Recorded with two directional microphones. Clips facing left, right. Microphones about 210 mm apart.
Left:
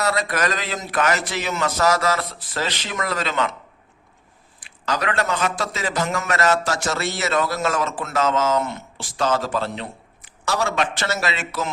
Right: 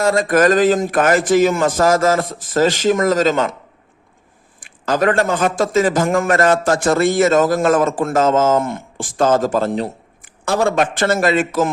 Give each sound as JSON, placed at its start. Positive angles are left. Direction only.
{"t": 0.0, "sound": "a man's voice", "side_deg": -45}
{"t": 4.6, "sound": "a man's voice", "side_deg": -50}